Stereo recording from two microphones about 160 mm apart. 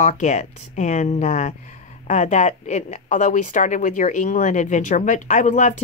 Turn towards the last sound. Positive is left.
turn(degrees=50)  # may be behind; listen again after turning